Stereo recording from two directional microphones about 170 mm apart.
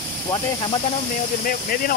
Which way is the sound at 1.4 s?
55° left (ahead or behind).